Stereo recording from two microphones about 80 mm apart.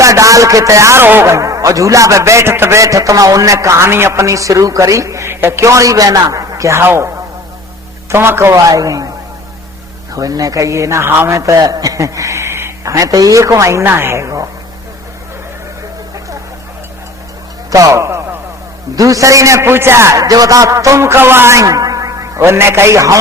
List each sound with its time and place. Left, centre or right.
0.0 s a man's voice: right
8.1 s a man's voice: right
8.7 s a man's voice: right
11.6 s a man's voice: right
17.7 s a man's voice: right
20.2 s a man's voice: right
22.4 s a man's voice: right